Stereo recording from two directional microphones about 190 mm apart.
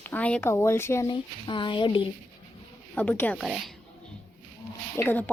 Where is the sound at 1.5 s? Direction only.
25° left (ahead or behind).